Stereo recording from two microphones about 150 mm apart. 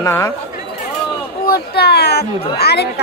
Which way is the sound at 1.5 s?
90° left.